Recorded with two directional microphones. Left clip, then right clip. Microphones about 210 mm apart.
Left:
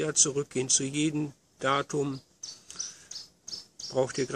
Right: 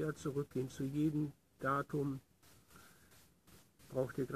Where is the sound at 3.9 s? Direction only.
20° left (ahead or behind).